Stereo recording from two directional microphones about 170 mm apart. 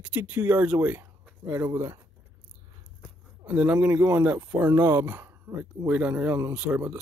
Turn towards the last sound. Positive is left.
turn(degrees=-10)  # may be behind; listen again after turning